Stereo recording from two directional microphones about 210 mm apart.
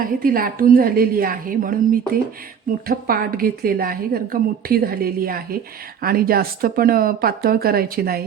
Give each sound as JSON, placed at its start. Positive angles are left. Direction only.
{"t": 0.2, "sound": "a woman's voice", "side_deg": -45}